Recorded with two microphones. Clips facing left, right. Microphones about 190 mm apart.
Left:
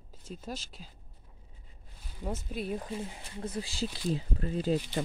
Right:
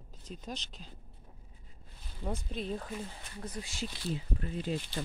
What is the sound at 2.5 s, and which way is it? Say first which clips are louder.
Speech: left 2 dB; 10° left (ahead or behind).